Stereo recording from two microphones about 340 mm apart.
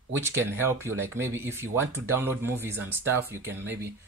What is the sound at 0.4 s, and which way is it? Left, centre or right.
Speech, centre.